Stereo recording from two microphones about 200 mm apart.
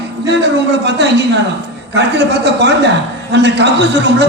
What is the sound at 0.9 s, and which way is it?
Speech, 60° right (ahead or behind).